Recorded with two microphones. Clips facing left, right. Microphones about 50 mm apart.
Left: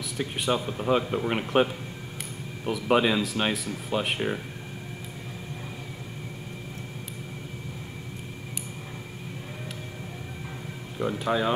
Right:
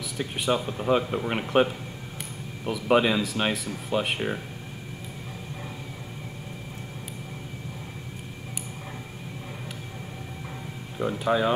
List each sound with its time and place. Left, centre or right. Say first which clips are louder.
0.2 s speech: right 1 dB; centre
11.0 s speech: right 2 dB; centre